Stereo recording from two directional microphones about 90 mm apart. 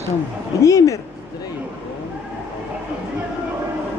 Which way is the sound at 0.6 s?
35° left (ahead or behind).